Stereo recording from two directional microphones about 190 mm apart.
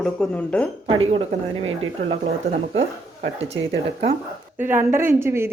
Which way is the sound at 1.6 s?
90° right.